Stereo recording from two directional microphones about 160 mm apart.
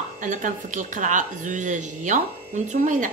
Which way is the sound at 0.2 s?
55° right (ahead or behind).